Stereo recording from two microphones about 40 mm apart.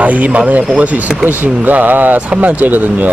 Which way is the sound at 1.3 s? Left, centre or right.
Right.